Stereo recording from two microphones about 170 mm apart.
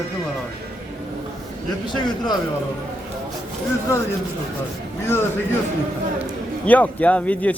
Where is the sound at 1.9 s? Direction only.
25° left (ahead or behind).